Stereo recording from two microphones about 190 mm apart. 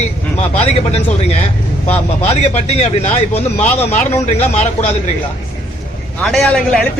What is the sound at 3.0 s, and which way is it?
Speech, 40° left (ahead or behind).